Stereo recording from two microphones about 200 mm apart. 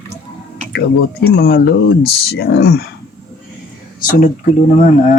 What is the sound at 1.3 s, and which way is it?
Speech, 50° left (ahead or behind).